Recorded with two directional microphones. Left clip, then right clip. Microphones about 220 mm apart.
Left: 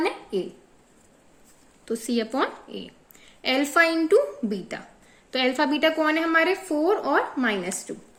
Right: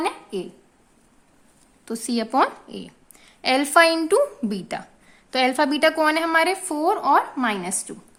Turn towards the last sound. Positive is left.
turn(degrees=-30)  # may be behind; listen again after turning